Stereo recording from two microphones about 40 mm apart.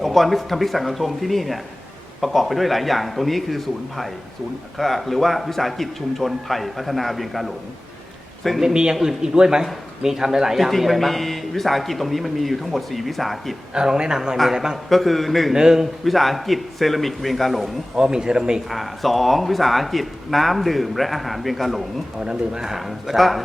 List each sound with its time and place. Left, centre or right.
0.0 s speech: centre
8.6 s a man's voice: centre
10.6 s speech: centre
13.7 s a man's voice: centre
14.8 s speech: centre
15.5 s a man's voice: centre
16.0 s speech: centre
17.9 s speech: centre
18.7 s speech: centre
22.2 s speech: centre
22.7 s speech: centre